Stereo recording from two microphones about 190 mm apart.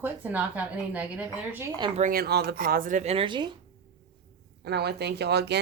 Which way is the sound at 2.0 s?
50° right (ahead or behind).